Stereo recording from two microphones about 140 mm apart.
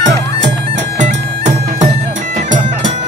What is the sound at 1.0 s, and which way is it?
Bagpipes, 60° right (ahead or behind).